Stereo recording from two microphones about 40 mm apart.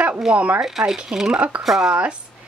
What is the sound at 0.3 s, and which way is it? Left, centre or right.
Speech, centre.